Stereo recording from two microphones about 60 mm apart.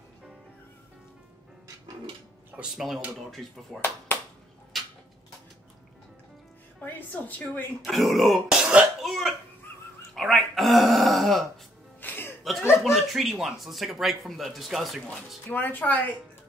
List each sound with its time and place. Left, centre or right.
2.6 s speech: centre
6.8 s a woman's voice: left
7.8 s speech: centre
8.5 s throat clearing: centre
9.0 s hiccup: centre
10.1 s burping: centre
12.0 s music: left
12.8 s speech: centre
15.4 s speech: left